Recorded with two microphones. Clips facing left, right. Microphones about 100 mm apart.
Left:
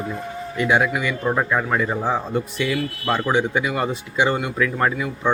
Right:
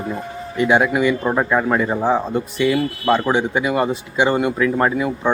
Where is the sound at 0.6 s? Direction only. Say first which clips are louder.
Right 4 dB; 20° right (ahead or behind).